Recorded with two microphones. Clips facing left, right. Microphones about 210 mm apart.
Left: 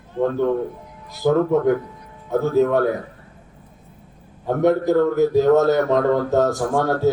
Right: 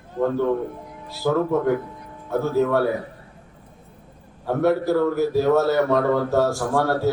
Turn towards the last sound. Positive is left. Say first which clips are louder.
# left 2 dB
turn(degrees=15)  # may be behind; listen again after turning